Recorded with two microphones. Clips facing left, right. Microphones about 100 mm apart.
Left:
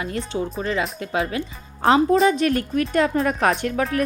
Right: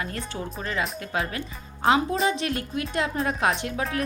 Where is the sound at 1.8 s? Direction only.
40° left (ahead or behind).